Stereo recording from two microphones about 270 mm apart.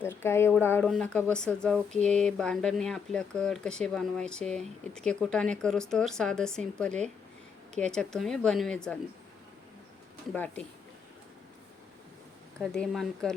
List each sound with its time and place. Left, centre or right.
0.0 s speech: centre
2.0 s a sound: right
2.2 s speech: centre
10.3 s speech: centre
12.7 s speech: centre